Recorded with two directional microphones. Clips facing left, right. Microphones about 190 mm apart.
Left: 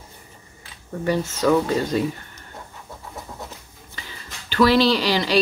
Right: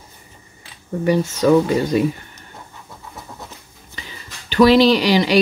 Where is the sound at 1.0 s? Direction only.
15° right (ahead or behind).